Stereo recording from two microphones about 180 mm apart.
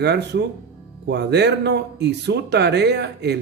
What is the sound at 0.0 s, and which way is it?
Speech, 65° right (ahead or behind).